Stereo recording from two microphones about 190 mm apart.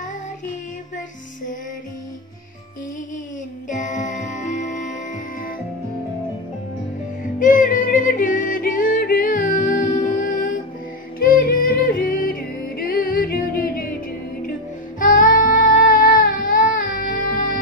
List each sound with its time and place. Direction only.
3.7 s music: 40° left (ahead or behind)
7.3 s music: 45° left (ahead or behind)
15.0 s child singing: 45° left (ahead or behind)